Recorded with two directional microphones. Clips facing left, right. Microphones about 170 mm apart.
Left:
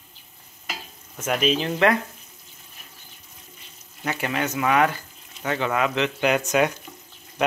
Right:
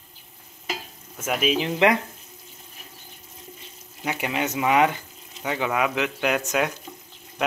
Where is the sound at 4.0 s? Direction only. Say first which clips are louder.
Even; 15° right (ahead or behind).